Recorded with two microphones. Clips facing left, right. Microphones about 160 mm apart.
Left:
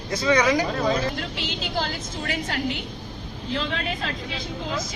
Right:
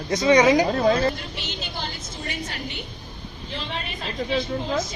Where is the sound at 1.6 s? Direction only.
90° left.